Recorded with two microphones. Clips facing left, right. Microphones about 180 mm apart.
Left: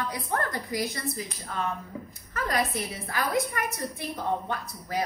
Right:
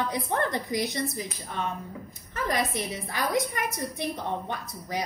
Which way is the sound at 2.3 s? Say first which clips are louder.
Even; 20° right (ahead or behind).